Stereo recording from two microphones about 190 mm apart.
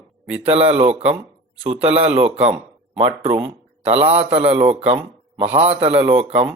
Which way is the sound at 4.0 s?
30° right (ahead or behind).